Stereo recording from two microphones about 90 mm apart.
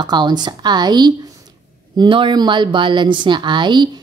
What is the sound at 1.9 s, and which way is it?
A woman's voice, 65° right (ahead or behind).